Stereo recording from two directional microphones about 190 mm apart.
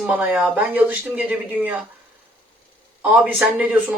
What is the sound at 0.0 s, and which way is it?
Speech, 5° right (ahead or behind).